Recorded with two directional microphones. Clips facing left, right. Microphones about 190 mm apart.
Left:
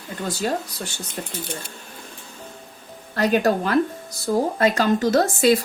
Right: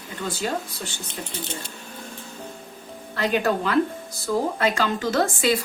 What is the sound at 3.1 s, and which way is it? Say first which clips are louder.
Speech: left 3 dB; 45° left (ahead or behind).